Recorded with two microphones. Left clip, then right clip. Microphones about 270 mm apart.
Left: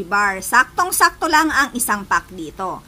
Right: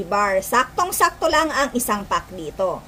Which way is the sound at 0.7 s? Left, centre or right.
Left.